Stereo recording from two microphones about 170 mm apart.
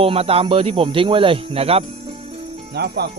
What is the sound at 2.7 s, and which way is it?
Speech, 70° right (ahead or behind).